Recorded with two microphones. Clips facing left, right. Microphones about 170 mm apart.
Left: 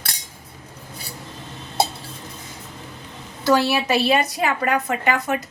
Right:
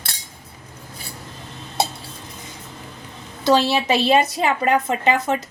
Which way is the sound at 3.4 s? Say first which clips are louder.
Right 1 dB; 20° right (ahead or behind).